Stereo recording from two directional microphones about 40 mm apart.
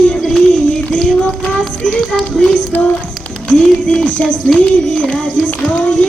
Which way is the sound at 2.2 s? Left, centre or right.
Centre.